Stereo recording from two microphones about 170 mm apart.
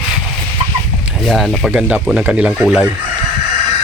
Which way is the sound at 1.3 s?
Centre (ahead or behind).